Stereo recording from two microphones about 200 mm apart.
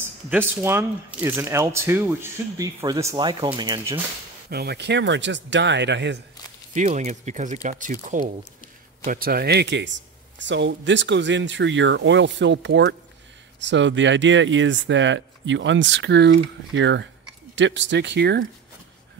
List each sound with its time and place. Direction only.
0.0 s speech: 10° right (ahead or behind)
4.5 s speech: 50° right (ahead or behind)
6.7 s speech: 35° right (ahead or behind); by 18.4 s 60° right (ahead or behind)